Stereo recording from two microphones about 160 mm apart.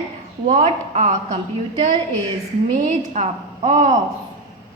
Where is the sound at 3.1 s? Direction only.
40° right (ahead or behind).